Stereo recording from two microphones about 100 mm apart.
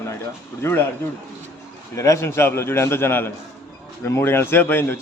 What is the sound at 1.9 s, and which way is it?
Speech, 30° left (ahead or behind).